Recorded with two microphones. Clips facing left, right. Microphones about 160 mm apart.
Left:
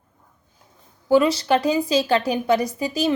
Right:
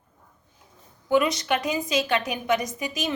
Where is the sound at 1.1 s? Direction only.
30° left (ahead or behind).